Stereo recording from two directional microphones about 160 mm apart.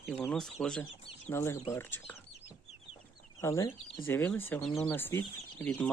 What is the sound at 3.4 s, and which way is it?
Speech, 20° left (ahead or behind).